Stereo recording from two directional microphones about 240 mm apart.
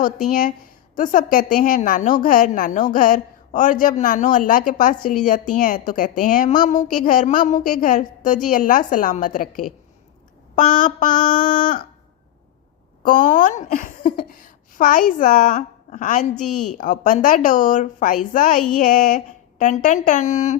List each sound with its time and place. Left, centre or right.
0.3 s a woman's voice: left
13.0 s speech: left
16.4 s a woman's voice: left
16.7 s a woman's voice: left